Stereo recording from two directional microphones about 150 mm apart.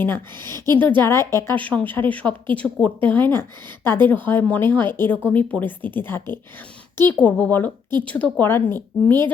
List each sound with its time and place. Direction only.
0.0 s speech: 15° left (ahead or behind)